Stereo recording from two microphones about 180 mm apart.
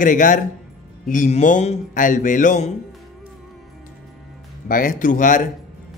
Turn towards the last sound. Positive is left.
turn(degrees=45)  # may be behind; listen again after turning